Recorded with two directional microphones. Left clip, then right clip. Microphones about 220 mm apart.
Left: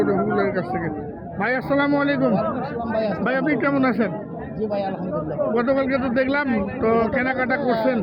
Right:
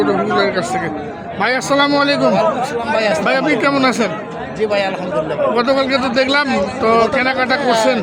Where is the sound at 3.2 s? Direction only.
10° right (ahead or behind).